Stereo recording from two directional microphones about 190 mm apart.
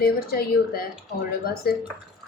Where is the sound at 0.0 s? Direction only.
55° left (ahead or behind).